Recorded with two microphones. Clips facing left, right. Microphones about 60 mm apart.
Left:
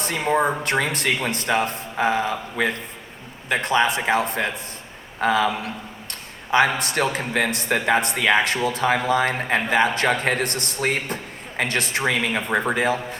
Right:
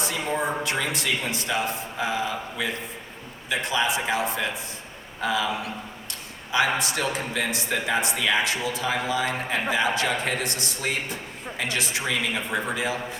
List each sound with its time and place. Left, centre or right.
0.0 s a man's voice: left